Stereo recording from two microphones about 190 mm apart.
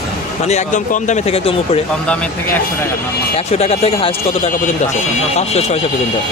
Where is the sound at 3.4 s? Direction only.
35° left (ahead or behind).